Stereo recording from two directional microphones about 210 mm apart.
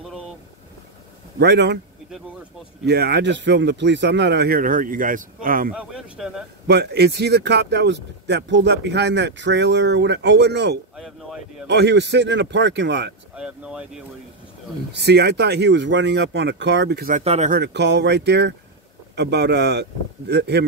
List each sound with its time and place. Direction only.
1.4 s speech: 55° right (ahead or behind)
2.8 s speech: 50° right (ahead or behind)
5.8 s speech: 5° right (ahead or behind)
6.7 s speech: 50° right (ahead or behind)
11.0 s speech: centre (ahead or behind)
11.6 s speech: 55° right (ahead or behind)
13.3 s speech: 5° right (ahead or behind)
14.9 s speech: 55° right (ahead or behind)
17.2 s speech: 30° right (ahead or behind)
17.6 s speech: 55° right (ahead or behind)